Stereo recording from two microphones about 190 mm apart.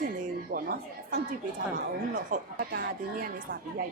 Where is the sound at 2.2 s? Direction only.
45° right (ahead or behind).